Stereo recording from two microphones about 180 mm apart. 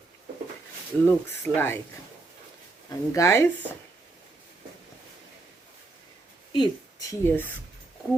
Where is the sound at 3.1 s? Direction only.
15° left (ahead or behind).